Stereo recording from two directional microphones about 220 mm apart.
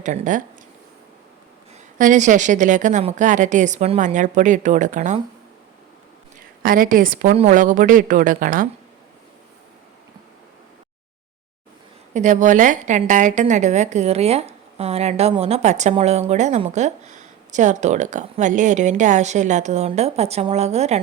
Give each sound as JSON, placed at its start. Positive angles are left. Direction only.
{"t": 0.0, "sound": "a woman's voice", "side_deg": -35}
{"t": 2.0, "sound": "a woman's voice", "side_deg": -35}
{"t": 6.6, "sound": "a woman's voice", "side_deg": -40}
{"t": 12.1, "sound": "a woman's voice", "side_deg": -35}